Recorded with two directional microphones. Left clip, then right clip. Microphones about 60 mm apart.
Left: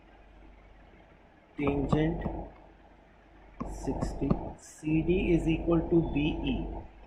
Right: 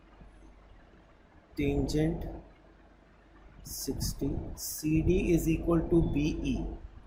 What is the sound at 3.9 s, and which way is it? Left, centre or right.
Speech, right.